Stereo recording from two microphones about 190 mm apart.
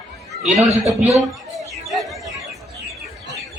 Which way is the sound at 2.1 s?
Centre (ahead or behind).